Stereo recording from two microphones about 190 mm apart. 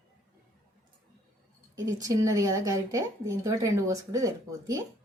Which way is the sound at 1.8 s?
15° right (ahead or behind).